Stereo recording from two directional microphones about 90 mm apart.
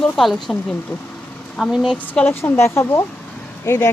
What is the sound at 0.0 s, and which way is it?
Speech, centre (ahead or behind).